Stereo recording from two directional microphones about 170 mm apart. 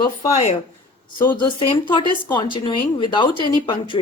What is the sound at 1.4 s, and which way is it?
A woman's voice, 25° left (ahead or behind).